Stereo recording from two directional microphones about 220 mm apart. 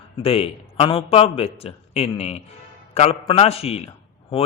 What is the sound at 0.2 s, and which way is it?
A man's voice, 25° left (ahead or behind).